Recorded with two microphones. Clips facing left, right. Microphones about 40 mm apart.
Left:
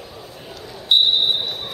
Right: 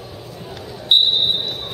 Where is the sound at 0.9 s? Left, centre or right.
Right.